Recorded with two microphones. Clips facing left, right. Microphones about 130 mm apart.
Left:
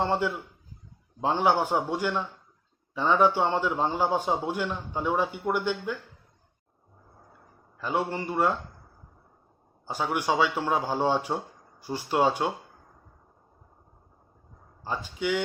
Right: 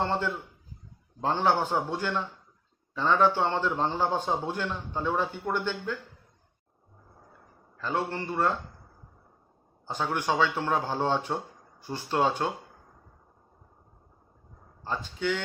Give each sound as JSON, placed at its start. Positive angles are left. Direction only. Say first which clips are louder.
{"t": 0.0, "sound": "a man's voice", "louder": "left 2 dB", "side_deg": 10}
{"t": 7.8, "sound": "a man's voice", "louder": "left 2 dB", "side_deg": 15}
{"t": 9.8, "sound": "a man's voice", "louder": "left 1 dB", "side_deg": 10}
{"t": 14.8, "sound": "a man's voice", "louder": "left 1 dB", "side_deg": 10}